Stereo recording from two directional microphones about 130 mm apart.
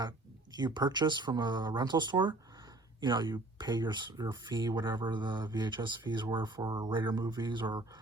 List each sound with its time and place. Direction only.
0.5 s speech: 35° right (ahead or behind)